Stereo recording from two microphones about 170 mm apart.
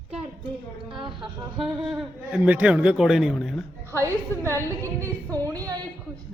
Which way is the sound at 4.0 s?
15° right (ahead or behind).